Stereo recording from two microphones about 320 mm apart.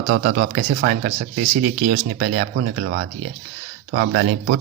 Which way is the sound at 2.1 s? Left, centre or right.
Right.